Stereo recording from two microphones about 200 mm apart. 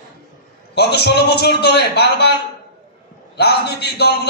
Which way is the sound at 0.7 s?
55° left (ahead or behind).